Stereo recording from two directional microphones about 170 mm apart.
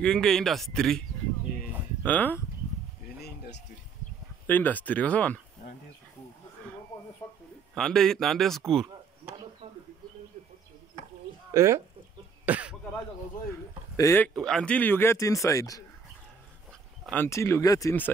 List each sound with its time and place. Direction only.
0.0 s speech: 5° left (ahead or behind)
2.0 s speech: 10° left (ahead or behind)
3.2 s a sound: 75° left (ahead or behind)
4.5 s speech: 10° left (ahead or behind)
7.7 s speech: 5° left (ahead or behind)
9.2 s a sound: 10° right (ahead or behind)
11.5 s speech: 15° right (ahead or behind)
12.4 s throat clearing: 10° right (ahead or behind)
13.9 s speech: 15° left (ahead or behind)
17.0 s speech: 10° left (ahead or behind)